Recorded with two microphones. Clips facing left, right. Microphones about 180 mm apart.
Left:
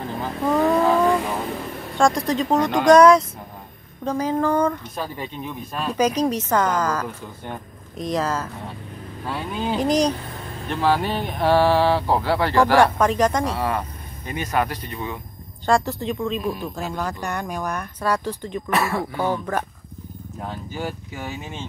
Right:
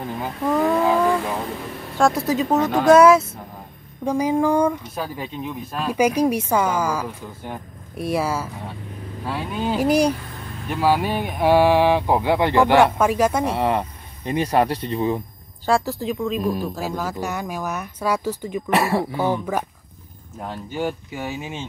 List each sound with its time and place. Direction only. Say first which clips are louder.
0.5 s vehicle: even; centre (ahead or behind)
2.0 s speech: right 1 dB; 5° right (ahead or behind); by 12.8 s 20° right (ahead or behind)
12.8 s speech: right 1 dB; 10° right (ahead or behind)
13.5 s speech: right 3 dB; 25° right (ahead or behind)
15.6 s speech: even; 5° right (ahead or behind)
18.7 s speech: right 3 dB; 30° right (ahead or behind)
19.1 s speech: right 1 dB; 10° right (ahead or behind)